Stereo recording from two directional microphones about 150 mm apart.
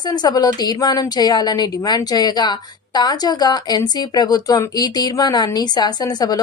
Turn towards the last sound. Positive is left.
turn(degrees=25)  # may be behind; listen again after turning